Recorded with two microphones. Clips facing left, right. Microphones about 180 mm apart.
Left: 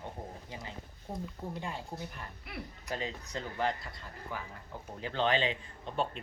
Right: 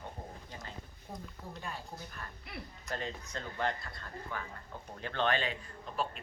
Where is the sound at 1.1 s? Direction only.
25° left (ahead or behind).